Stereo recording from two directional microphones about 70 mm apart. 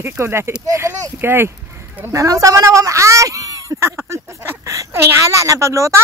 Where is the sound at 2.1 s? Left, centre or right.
Right.